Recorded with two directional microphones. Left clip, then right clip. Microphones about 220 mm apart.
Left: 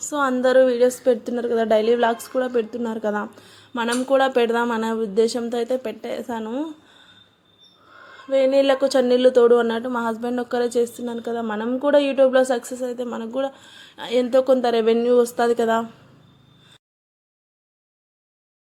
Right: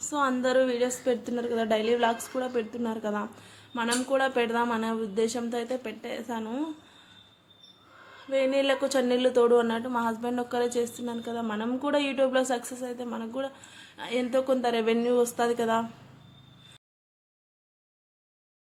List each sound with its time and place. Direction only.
0.0 s speech: 25° left (ahead or behind)
8.3 s speech: 25° left (ahead or behind)